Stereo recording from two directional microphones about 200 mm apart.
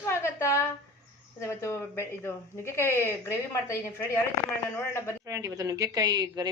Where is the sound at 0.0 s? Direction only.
15° left (ahead or behind).